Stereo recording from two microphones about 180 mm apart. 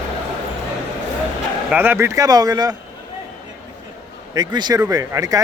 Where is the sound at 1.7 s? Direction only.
10° right (ahead or behind).